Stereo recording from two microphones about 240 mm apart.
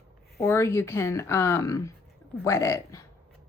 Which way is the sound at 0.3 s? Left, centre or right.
Centre.